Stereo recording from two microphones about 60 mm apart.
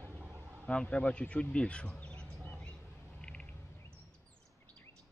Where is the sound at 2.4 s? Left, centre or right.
Left.